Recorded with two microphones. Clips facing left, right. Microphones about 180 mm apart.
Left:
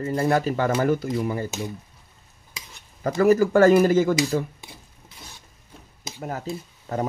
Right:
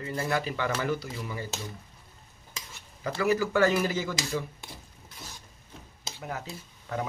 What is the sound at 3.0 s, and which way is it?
Speech, 45° left (ahead or behind).